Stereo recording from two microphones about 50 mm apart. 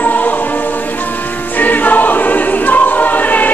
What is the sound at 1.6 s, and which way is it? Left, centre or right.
Choir, left.